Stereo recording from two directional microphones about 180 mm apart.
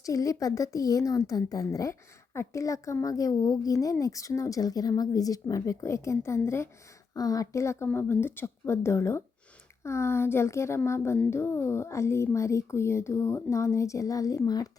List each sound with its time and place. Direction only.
0.0 s a woman's voice: 20° left (ahead or behind)